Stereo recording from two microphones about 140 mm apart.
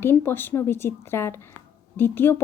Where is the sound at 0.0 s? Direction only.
15° left (ahead or behind).